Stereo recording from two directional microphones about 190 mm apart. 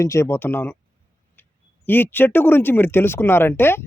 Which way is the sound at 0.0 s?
15° left (ahead or behind).